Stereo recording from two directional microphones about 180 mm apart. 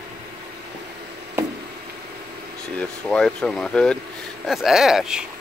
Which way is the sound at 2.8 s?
5° left (ahead or behind).